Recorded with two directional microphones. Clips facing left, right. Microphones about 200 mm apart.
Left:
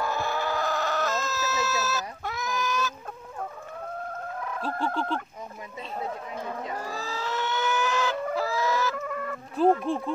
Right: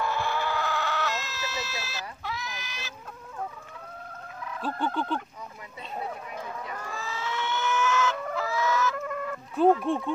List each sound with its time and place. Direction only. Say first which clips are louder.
0.0 s chicken: even; 40° left (ahead or behind)
4.7 s speech: even; 30° left (ahead or behind)
6.7 s chicken: left 3 dB; 35° left (ahead or behind)
8.9 s chicken: even; centre (ahead or behind)